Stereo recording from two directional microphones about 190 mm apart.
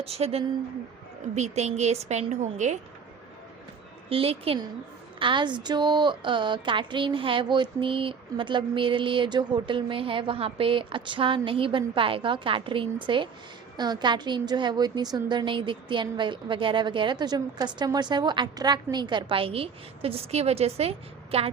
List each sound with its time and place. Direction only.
0.0 s a woman's voice: 30° right (ahead or behind)
4.1 s speech: 30° right (ahead or behind)